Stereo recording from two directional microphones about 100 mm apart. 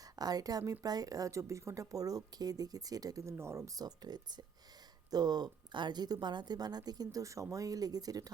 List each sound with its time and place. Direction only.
0.0 s a woman's voice: 40° right (ahead or behind)
3.7 s a woman's voice: 40° right (ahead or behind)